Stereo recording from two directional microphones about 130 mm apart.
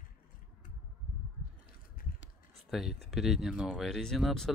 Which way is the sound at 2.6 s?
Centre (ahead or behind).